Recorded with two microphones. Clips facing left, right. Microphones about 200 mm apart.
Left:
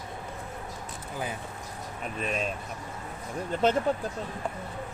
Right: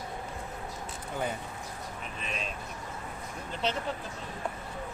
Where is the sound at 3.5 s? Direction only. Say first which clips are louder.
Left 8 dB; 50° left (ahead or behind).